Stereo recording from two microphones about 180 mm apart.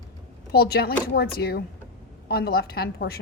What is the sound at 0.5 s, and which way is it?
A woman's voice, 60° left (ahead or behind).